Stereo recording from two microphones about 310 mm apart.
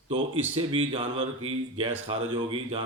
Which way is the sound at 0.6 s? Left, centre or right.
Centre.